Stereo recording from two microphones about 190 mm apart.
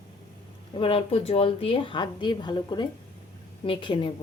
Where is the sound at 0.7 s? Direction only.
30° left (ahead or behind).